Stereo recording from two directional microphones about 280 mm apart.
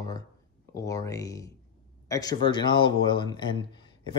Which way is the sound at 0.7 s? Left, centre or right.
Centre.